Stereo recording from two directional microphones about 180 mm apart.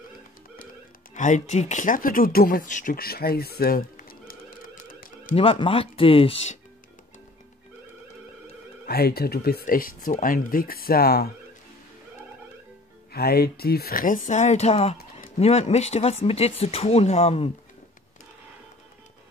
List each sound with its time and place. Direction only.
1.1 s speech: 45° left (ahead or behind)
4.3 s typewriter: 55° left (ahead or behind)
5.3 s speech: 30° left (ahead or behind)
8.8 s speech: 60° left (ahead or behind)
13.1 s speech: 60° left (ahead or behind); by 17.5 s 35° left (ahead or behind)